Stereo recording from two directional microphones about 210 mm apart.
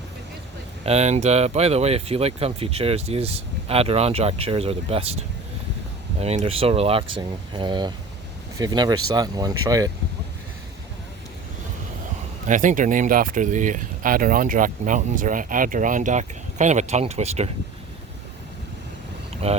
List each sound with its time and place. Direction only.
0.9 s speech: 30° right (ahead or behind)
12.5 s speech: 40° right (ahead or behind)
19.4 s speech: 30° right (ahead or behind)